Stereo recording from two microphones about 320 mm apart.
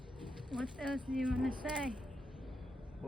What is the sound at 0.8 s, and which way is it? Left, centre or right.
Speech, centre.